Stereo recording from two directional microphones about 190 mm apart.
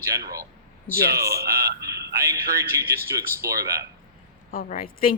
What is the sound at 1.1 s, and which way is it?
Speech, 15° right (ahead or behind).